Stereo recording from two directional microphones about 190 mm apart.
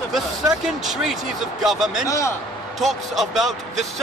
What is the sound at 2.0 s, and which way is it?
Speech, 15° left (ahead or behind).